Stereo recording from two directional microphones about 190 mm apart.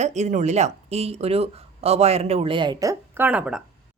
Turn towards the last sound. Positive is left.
turn(degrees=-5)  # may be behind; listen again after turning